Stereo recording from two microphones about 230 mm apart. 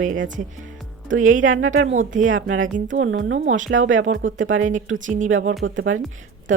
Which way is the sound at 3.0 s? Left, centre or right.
Right.